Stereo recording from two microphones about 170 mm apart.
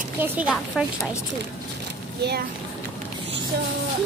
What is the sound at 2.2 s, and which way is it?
Speech, 65° right (ahead or behind).